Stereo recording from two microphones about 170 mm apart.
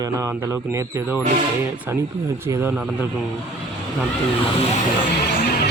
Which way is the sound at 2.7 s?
5° right (ahead or behind).